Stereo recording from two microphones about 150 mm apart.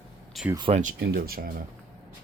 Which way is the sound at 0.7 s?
55° right (ahead or behind).